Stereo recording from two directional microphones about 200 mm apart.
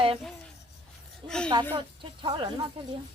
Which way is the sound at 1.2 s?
25° right (ahead or behind).